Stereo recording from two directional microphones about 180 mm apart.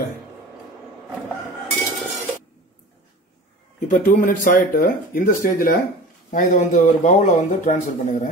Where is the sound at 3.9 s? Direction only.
45° left (ahead or behind).